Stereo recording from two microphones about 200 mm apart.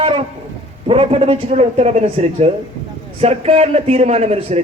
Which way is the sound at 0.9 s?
30° right (ahead or behind).